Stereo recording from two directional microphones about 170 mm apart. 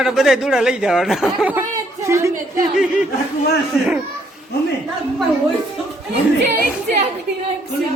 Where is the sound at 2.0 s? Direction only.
15° right (ahead or behind).